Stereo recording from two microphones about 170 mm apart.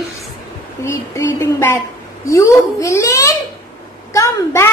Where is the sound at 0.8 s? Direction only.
15° left (ahead or behind).